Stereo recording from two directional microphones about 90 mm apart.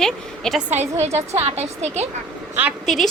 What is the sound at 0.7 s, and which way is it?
Speech, 25° right (ahead or behind).